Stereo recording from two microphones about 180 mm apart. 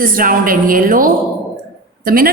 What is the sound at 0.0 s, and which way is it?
A woman's voice, 50° right (ahead or behind).